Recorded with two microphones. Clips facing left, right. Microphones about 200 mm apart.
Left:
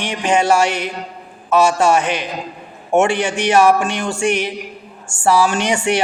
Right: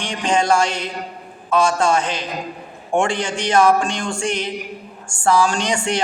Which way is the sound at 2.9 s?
25° left (ahead or behind).